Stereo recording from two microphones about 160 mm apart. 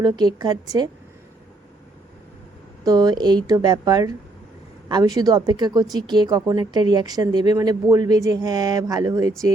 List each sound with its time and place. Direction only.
0.0 s speech: 25° right (ahead or behind)
2.8 s speech: 25° right (ahead or behind)